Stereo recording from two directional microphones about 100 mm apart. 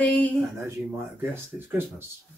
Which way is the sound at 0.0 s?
15° left (ahead or behind).